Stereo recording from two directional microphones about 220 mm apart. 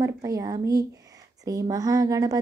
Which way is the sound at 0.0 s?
15° right (ahead or behind).